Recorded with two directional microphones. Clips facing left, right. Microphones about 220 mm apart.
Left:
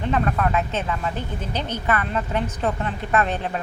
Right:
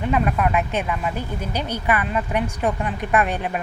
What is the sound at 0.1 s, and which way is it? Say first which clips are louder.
Speech: right 1 dB; 10° right (ahead or behind).